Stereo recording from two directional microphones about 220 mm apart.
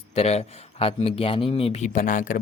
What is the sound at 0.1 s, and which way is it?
A man's voice, 30° left (ahead or behind).